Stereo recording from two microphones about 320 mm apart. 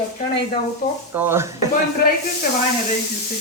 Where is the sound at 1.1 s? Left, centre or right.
Centre.